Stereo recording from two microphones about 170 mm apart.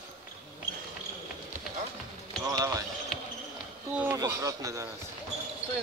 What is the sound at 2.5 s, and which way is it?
Basketball bounce, 20° right (ahead or behind).